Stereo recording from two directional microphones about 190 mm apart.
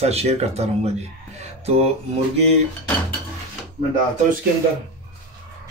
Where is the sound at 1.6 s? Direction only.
35° right (ahead or behind).